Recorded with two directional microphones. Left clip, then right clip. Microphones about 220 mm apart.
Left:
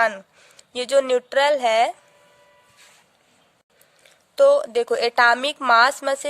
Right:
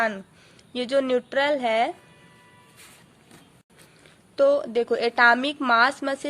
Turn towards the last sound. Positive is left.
turn(degrees=35)  # may be behind; listen again after turning